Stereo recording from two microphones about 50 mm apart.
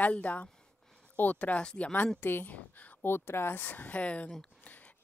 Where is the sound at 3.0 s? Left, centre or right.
Left.